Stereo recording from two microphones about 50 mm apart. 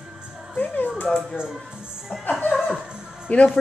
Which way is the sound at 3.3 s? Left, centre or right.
Left.